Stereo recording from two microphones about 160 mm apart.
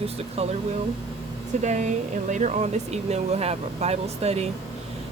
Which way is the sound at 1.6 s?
50° right (ahead or behind).